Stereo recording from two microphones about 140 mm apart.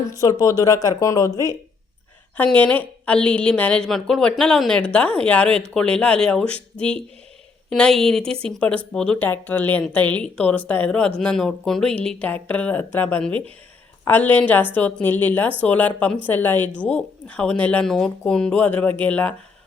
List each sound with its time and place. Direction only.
0.1 s speech: 25° left (ahead or behind)
2.3 s a woman's voice: 10° left (ahead or behind)